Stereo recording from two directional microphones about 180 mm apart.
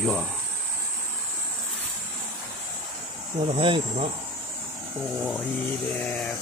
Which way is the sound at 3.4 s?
30° right (ahead or behind).